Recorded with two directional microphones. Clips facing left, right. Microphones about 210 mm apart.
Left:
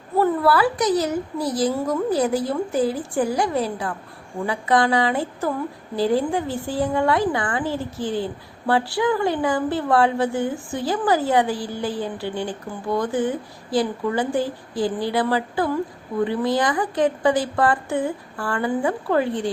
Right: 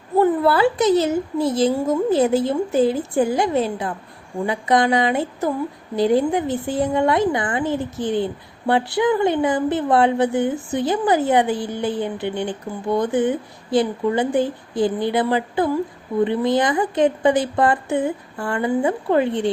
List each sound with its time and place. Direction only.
0.2 s a woman's voice: 20° right (ahead or behind)